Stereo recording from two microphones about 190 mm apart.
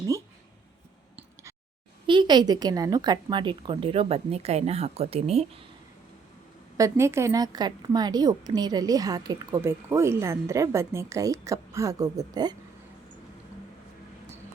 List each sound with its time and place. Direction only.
2.0 s a woman's voice: 25° right (ahead or behind)
6.7 s a woman's voice: 15° right (ahead or behind)